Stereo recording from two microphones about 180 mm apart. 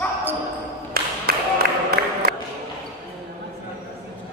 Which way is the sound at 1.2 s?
55° right (ahead or behind).